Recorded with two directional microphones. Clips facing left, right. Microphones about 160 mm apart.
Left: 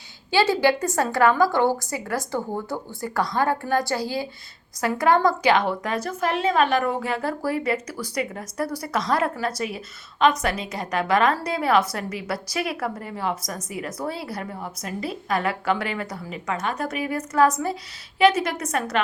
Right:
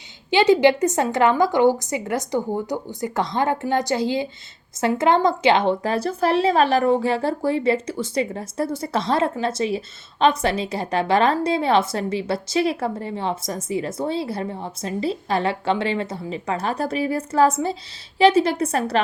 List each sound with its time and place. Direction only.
0.3 s a woman's voice: 20° right (ahead or behind)